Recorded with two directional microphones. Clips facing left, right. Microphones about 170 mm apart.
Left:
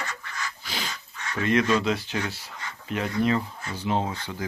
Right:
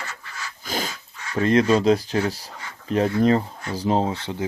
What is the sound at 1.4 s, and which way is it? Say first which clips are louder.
A man's voice: right 5 dB; 35° right (ahead or behind).